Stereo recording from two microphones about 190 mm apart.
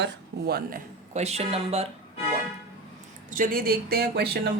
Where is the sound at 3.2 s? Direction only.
45° right (ahead or behind).